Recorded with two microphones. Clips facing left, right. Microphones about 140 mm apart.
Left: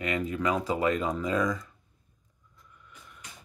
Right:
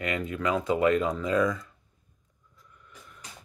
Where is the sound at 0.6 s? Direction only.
Centre (ahead or behind).